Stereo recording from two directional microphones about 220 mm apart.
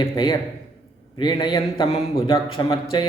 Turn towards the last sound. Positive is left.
turn(degrees=20)  # may be behind; listen again after turning